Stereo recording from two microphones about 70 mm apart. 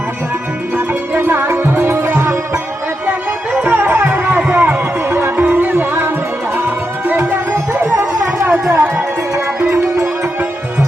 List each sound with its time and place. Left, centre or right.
1.1 s music: right
3.6 s music: right
7.1 s music: right
8.7 s music: right